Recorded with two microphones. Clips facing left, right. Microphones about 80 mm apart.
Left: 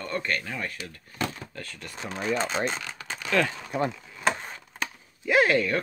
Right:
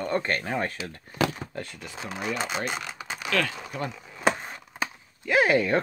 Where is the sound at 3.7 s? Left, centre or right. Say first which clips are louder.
Left 6 dB; left.